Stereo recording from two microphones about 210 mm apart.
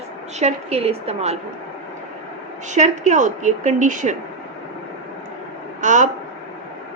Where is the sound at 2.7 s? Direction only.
35° right (ahead or behind).